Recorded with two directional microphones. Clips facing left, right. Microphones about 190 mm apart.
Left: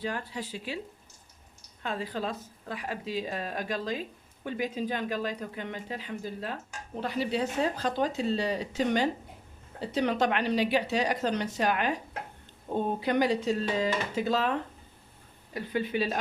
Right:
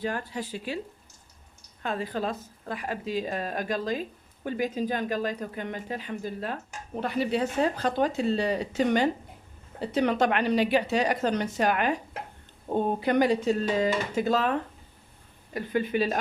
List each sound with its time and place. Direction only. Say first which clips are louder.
0.0 s a woman's voice: right 3 dB; 50° right (ahead or behind)
1.8 s a woman's voice: right 3 dB; 50° right (ahead or behind)
15.5 s a woman's voice: right 3 dB; 50° right (ahead or behind)